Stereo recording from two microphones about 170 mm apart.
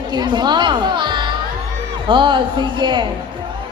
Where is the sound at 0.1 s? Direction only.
25° right (ahead or behind).